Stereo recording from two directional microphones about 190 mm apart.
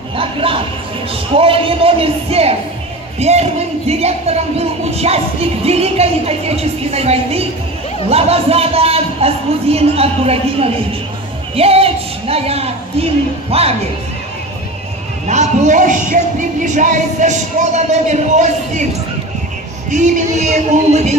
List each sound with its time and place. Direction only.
0.1 s a sound: 30° right (ahead or behind)
1.3 s a man's voice: 30° right (ahead or behind)
11.5 s a sound: 30° right (ahead or behind)
13.5 s speech: 30° right (ahead or behind)
15.2 s speech: 40° right (ahead or behind)
19.9 s speech: 40° right (ahead or behind)